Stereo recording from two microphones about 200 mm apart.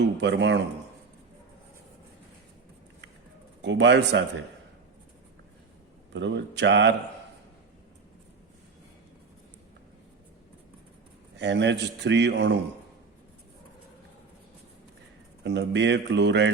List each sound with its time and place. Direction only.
0.0 s speech: 60° right (ahead or behind)
3.6 s speech: 60° right (ahead or behind)
6.1 s speech: 60° right (ahead or behind)
11.3 s speech: 60° right (ahead or behind)
15.4 s speech: 60° right (ahead or behind)